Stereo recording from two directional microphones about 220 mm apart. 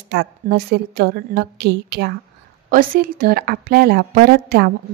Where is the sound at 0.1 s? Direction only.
50° right (ahead or behind).